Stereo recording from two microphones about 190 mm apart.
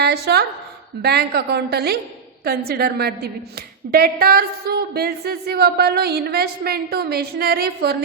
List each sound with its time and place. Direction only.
0.0 s a woman's voice: 60° right (ahead or behind)